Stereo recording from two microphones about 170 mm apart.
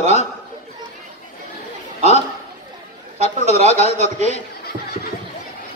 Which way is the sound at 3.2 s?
40° left (ahead or behind).